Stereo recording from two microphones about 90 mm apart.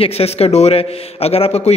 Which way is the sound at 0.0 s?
90° left.